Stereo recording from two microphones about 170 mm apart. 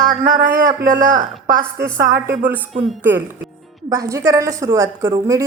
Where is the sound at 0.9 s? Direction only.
20° right (ahead or behind).